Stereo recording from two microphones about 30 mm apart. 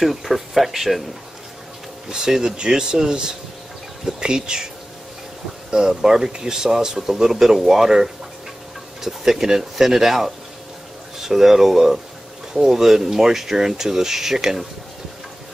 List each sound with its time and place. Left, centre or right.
0.0 s speech: centre
2.0 s speech: right
5.7 s speech: centre
7.0 s speech: centre